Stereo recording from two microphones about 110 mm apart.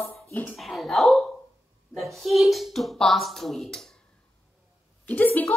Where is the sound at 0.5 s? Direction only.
Centre (ahead or behind).